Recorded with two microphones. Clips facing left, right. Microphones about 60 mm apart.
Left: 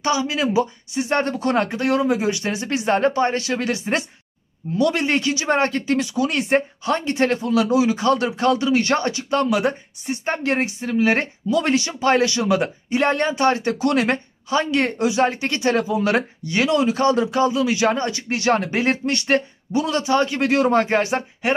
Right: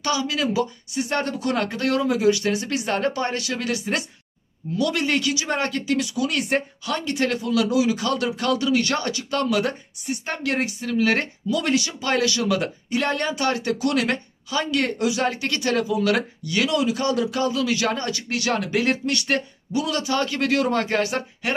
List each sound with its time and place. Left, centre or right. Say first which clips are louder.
0.0 s speech: left 3 dB; left